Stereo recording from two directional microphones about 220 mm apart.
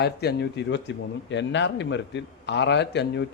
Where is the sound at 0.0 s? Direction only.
50° left (ahead or behind).